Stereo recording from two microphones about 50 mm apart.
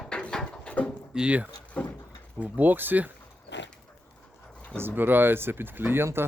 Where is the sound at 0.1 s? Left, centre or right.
Centre.